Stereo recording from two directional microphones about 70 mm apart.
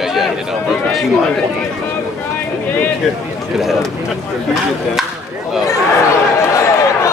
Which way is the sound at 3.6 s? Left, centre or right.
Centre.